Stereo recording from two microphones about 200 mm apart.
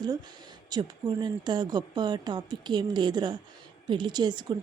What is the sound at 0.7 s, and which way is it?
Speech, 20° right (ahead or behind).